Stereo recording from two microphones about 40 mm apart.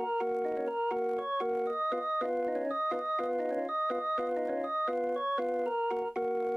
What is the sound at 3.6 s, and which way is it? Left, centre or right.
Music, right.